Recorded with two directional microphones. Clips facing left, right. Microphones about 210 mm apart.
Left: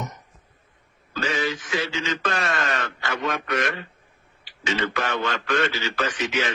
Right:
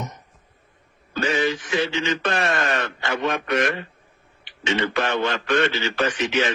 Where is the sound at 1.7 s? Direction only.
30° right (ahead or behind).